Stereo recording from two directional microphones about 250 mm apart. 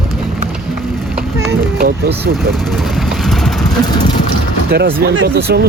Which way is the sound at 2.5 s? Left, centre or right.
Centre.